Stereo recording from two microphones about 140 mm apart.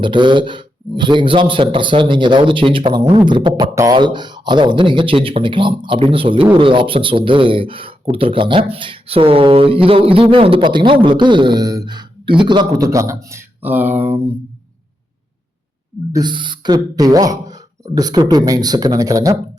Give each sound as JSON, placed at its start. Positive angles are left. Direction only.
{"t": 0.0, "sound": "speech", "side_deg": -35}
{"t": 16.1, "sound": "speech", "side_deg": -35}